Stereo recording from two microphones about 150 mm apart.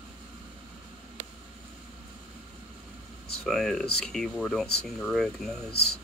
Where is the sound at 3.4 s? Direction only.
5° left (ahead or behind).